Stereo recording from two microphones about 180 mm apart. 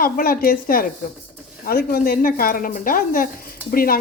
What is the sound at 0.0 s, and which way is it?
A woman's voice, 55° left (ahead or behind).